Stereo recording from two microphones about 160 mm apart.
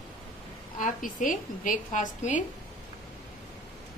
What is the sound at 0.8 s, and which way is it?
A woman's voice, 55° left (ahead or behind).